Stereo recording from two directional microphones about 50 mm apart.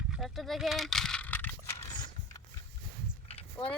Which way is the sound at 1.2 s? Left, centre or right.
Left.